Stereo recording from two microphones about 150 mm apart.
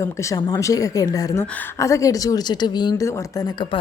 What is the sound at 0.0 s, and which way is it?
Speech, 20° left (ahead or behind).